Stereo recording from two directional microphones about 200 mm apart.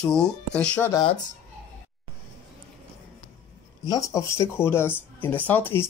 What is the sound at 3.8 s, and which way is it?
Speech, 15° left (ahead or behind).